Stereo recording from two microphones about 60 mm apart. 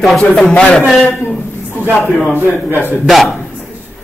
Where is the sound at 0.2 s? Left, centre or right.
Centre.